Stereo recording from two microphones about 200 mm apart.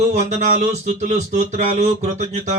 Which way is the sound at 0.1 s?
35° right (ahead or behind).